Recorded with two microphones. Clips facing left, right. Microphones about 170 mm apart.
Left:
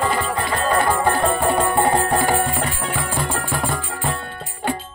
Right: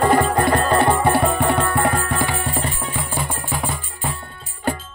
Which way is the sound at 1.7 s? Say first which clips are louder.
Left 2 dB; 25° left (ahead or behind).